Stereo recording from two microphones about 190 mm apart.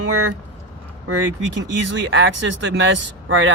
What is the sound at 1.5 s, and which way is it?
Speech, 75° right (ahead or behind).